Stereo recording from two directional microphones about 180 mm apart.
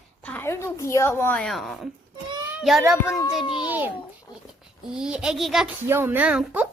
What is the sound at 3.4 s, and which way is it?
Speech, 30° left (ahead or behind).